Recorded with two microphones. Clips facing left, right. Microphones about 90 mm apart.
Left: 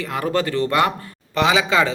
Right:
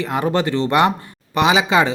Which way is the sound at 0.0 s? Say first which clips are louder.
Right 3 dB; 20° right (ahead or behind).